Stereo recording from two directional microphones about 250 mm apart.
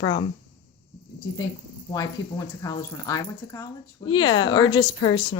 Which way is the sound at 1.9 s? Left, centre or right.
Centre.